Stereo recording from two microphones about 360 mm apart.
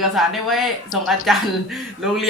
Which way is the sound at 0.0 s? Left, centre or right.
Centre.